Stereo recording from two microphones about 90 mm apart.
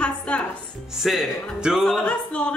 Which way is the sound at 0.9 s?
5° right (ahead or behind).